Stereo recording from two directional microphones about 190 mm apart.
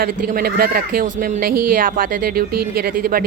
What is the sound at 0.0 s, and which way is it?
Speech, 45° right (ahead or behind).